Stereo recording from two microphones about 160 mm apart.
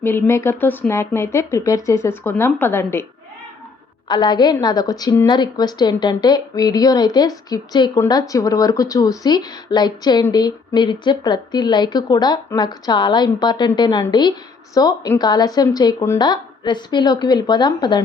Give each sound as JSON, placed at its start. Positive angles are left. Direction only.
{"t": 0.0, "sound": "speech", "side_deg": 15}
{"t": 4.1, "sound": "a woman's voice", "side_deg": 30}